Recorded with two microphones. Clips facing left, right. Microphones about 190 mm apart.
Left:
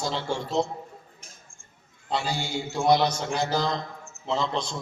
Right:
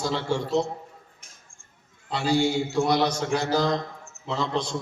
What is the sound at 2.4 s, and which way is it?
A man's voice, 70° right (ahead or behind).